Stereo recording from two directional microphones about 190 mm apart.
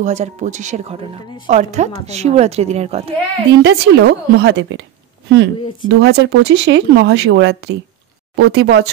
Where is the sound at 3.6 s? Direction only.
65° right (ahead or behind).